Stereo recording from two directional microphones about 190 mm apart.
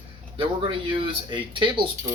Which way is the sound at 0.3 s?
25° right (ahead or behind).